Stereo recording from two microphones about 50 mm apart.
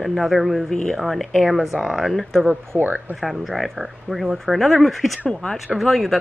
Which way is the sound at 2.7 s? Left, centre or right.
Right.